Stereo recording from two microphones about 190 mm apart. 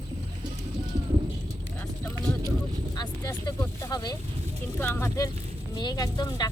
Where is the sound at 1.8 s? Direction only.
10° left (ahead or behind).